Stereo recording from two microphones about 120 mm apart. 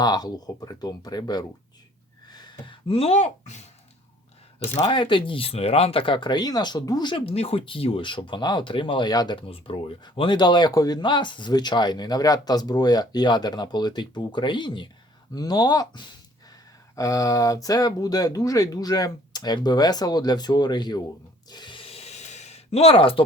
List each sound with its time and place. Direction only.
0.0 s speech: 35° left (ahead or behind)
2.3 s a sound: 35° left (ahead or behind)
2.9 s speech: 60° left (ahead or behind)
4.9 s speech: 45° left (ahead or behind)
9.5 s speech: 50° left (ahead or behind)
10.0 s speech: 40° left (ahead or behind)
21.5 s a sound: 40° left (ahead or behind)